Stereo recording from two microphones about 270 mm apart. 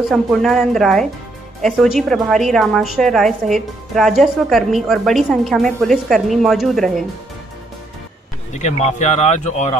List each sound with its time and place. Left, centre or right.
0.1 s a woman's voice: centre
8.5 s speech: left